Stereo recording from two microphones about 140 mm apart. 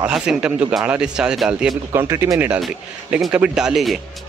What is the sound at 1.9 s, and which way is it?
Speech, 20° right (ahead or behind).